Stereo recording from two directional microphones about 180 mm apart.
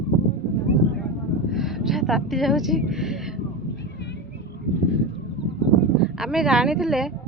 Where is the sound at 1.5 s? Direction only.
Centre (ahead or behind).